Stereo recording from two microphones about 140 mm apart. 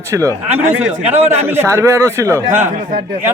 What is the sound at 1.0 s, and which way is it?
Speech, 45° right (ahead or behind).